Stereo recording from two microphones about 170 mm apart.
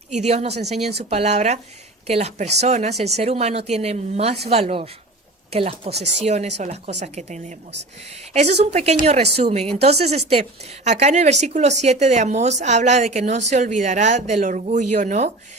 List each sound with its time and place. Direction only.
0.1 s speech: 40° right (ahead or behind)